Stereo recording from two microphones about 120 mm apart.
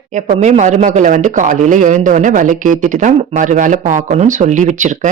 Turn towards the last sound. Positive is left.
turn(degrees=-90)